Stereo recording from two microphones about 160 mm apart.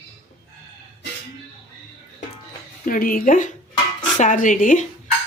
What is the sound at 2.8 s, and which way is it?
Speech, 60° left (ahead or behind).